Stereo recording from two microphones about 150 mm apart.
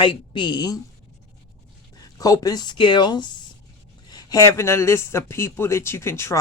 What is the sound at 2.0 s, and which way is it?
Speech, 25° left (ahead or behind).